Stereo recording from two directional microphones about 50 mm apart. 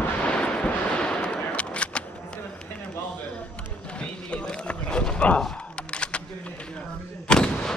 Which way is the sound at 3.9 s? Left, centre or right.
Centre.